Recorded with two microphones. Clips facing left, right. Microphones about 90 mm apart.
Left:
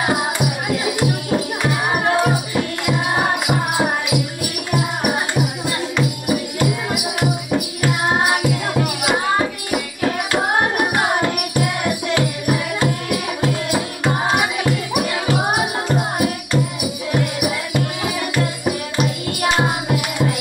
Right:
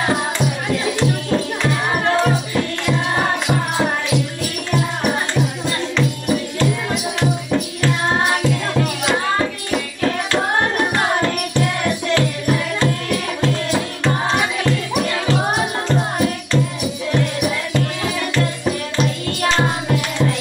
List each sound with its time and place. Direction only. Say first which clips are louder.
0.0 s music: even; 15° left (ahead or behind)